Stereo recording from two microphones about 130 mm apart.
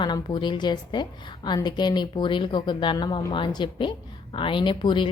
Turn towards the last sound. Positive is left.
turn(degrees=40)  # may be behind; listen again after turning